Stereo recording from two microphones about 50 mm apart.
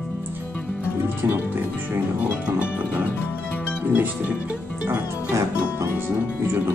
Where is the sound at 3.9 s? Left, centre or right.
Right.